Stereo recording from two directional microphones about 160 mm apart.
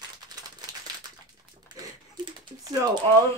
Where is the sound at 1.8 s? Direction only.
25° right (ahead or behind).